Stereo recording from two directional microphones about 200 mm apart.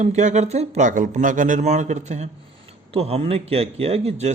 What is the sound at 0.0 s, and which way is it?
A man's voice, 35° right (ahead or behind).